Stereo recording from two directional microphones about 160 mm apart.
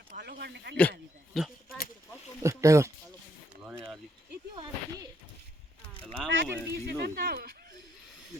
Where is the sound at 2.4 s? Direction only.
20° right (ahead or behind).